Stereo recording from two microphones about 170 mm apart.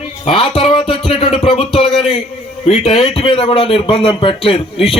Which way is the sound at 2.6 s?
35° left (ahead or behind).